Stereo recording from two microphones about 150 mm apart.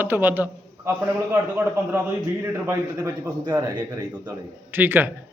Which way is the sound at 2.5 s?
20° right (ahead or behind).